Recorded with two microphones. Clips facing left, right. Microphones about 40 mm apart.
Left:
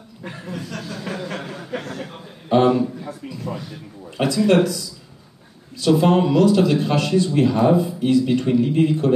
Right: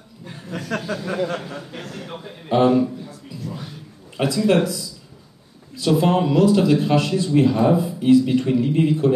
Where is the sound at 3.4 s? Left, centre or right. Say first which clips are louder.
Left 4 dB; left.